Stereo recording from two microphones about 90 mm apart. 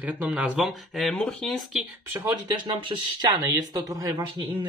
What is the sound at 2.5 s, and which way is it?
Speech, 55° right (ahead or behind).